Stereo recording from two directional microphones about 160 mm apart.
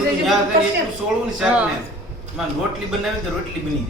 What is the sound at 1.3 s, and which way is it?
Speech, 5° right (ahead or behind).